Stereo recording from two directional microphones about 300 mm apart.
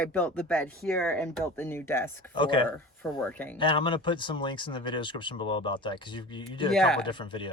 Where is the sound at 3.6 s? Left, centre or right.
Centre.